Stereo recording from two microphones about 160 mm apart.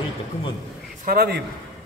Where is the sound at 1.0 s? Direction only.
75° right (ahead or behind).